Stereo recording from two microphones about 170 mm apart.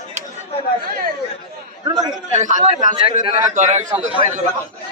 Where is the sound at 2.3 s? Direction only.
45° right (ahead or behind).